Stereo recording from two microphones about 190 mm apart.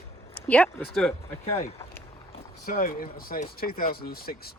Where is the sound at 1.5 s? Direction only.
30° left (ahead or behind).